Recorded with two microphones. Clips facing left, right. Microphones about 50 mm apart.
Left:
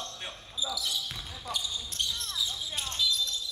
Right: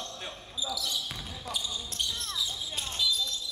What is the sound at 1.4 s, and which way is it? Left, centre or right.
Basketball bounce, centre.